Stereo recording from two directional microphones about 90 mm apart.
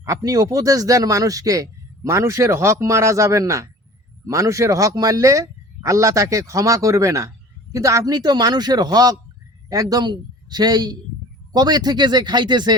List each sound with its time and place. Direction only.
0.0 s a man's voice: 40° right (ahead or behind); by 12.7 s 55° right (ahead or behind)